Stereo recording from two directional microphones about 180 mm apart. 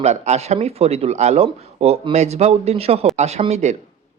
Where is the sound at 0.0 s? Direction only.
40° right (ahead or behind).